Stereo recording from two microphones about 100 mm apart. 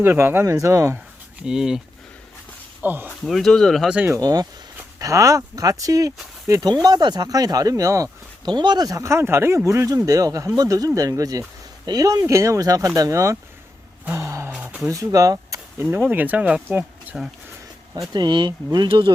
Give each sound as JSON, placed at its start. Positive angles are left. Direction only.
{"t": 0.0, "sound": "speech", "side_deg": -25}
{"t": 1.4, "sound": "speech", "side_deg": -5}
{"t": 2.8, "sound": "speech", "side_deg": -20}
{"t": 3.2, "sound": "speech", "side_deg": 0}
{"t": 3.8, "sound": "speech", "side_deg": -15}
{"t": 4.1, "sound": "speech", "side_deg": -35}
{"t": 8.4, "sound": "speech", "side_deg": -45}
{"t": 14.0, "sound": "a sound", "side_deg": -25}
{"t": 14.5, "sound": "a sound", "side_deg": -15}
{"t": 14.8, "sound": "speech", "side_deg": -35}
{"t": 15.8, "sound": "speech", "side_deg": -20}
{"t": 18.1, "sound": "speech", "side_deg": -45}
{"t": 18.9, "sound": "speech", "side_deg": -55}